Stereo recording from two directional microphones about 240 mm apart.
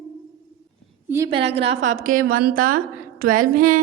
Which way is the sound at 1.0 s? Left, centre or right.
Centre.